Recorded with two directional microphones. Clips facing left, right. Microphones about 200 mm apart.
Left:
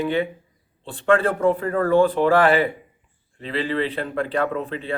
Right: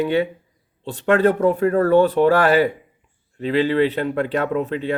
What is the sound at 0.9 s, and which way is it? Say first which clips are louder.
Speech: right 3 dB; 40° right (ahead or behind).